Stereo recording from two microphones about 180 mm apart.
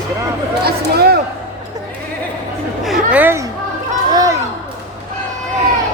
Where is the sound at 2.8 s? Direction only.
5° right (ahead or behind).